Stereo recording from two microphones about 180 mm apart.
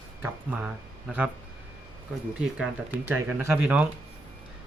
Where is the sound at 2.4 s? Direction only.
10° right (ahead or behind).